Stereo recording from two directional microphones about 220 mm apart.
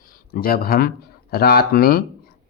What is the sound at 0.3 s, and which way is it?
Speech, 45° left (ahead or behind).